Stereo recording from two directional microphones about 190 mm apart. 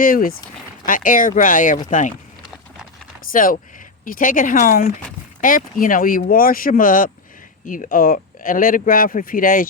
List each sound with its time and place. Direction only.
0.0 s speech: 50° left (ahead or behind)
3.3 s speech: 45° left (ahead or behind)